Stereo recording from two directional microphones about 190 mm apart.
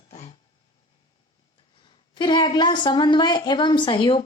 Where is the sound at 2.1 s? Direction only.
25° left (ahead or behind).